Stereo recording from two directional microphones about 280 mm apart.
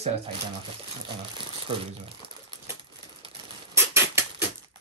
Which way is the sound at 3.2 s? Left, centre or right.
Centre.